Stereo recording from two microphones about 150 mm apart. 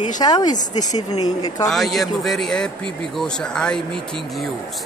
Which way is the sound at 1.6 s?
Centre (ahead or behind).